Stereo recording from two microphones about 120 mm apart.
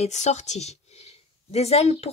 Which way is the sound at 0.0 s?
75° left (ahead or behind).